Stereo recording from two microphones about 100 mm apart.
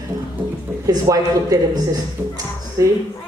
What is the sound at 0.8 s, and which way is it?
Speech, 35° right (ahead or behind).